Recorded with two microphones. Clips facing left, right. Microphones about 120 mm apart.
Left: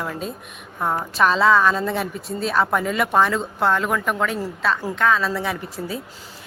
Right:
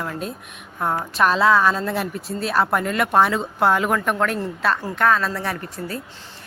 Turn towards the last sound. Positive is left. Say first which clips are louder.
# left 1 dB
turn(degrees=5)  # may be behind; listen again after turning